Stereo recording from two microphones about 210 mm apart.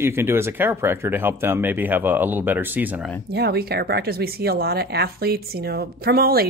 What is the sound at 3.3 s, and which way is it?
Speech, 50° right (ahead or behind).